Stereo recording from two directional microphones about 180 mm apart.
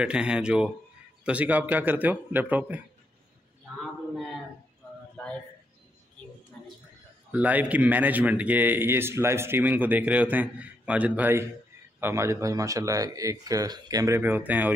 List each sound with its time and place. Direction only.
0.0 s a man's voice: 5° right (ahead or behind)
3.7 s a sound: centre (ahead or behind)
7.2 s a man's voice: 10° right (ahead or behind)